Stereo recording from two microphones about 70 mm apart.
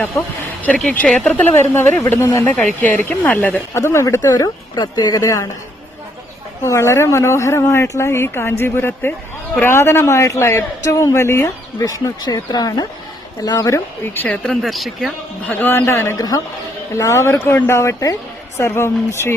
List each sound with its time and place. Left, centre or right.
1.0 s a woman's voice: centre
1.3 s a man's voice: left
2.6 s speech: centre
3.8 s a man's voice: left
4.4 s a woman's voice: left
6.7 s a man's voice: left
12.2 s a woman's voice: left
13.7 s speech: left
14.4 s speech: centre
15.4 s speech: left
16.1 s a woman's voice: left
16.9 s speech: left
17.7 s a man's voice: left